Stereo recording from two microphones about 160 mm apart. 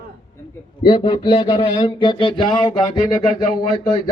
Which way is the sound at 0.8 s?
30° left (ahead or behind).